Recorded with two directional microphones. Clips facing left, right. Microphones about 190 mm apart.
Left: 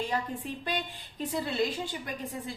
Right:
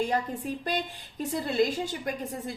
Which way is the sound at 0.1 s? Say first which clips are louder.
Right 4 dB; 45° right (ahead or behind).